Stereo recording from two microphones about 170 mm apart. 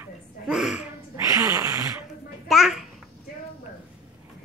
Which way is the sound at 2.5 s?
Centre (ahead or behind).